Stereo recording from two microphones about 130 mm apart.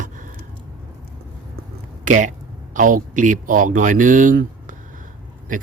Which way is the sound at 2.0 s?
75° right (ahead or behind).